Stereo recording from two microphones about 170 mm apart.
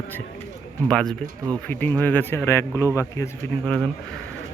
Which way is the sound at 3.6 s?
5° left (ahead or behind).